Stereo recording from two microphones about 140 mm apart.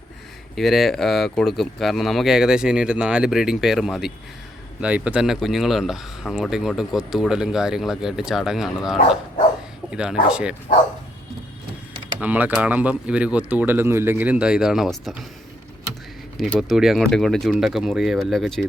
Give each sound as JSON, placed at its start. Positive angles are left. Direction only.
{"t": 0.5, "sound": "speech", "side_deg": 0}
{"t": 12.2, "sound": "speech", "side_deg": -10}
{"t": 16.4, "sound": "speech", "side_deg": 0}